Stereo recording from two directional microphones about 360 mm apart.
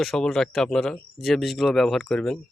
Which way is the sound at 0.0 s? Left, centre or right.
Centre.